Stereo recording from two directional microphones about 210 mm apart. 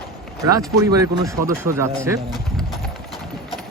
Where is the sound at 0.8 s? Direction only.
15° right (ahead or behind).